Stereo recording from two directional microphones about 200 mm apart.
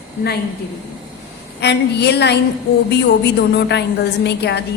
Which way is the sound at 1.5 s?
55° left (ahead or behind).